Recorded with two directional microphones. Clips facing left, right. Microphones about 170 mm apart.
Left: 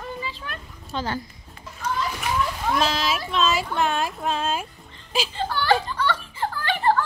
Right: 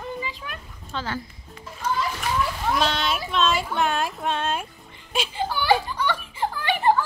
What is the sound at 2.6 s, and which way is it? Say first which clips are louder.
Speech: left 1 dB; centre (ahead or behind).